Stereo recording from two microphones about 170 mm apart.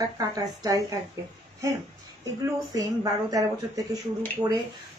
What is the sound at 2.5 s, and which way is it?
A woman's voice, 20° right (ahead or behind).